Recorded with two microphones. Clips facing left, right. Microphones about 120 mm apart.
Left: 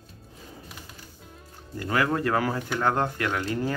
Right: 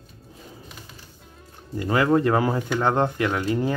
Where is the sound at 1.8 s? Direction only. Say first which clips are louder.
Right 5 dB; 20° right (ahead or behind).